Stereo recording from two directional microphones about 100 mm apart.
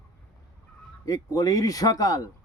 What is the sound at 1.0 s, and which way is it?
Speech, 35° left (ahead or behind).